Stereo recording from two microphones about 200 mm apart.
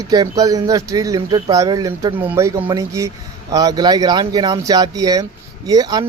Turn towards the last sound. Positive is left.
turn(degrees=-20)  # may be behind; listen again after turning